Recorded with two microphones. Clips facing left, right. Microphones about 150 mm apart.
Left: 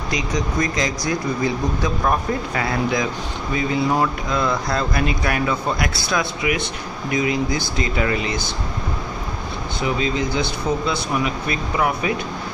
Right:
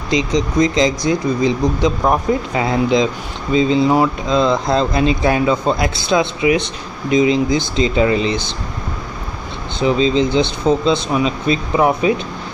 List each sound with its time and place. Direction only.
0.1 s speech: 25° right (ahead or behind)
9.8 s speech: 25° right (ahead or behind)